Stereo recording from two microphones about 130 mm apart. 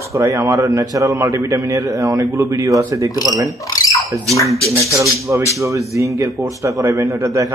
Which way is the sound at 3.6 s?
30° left (ahead or behind).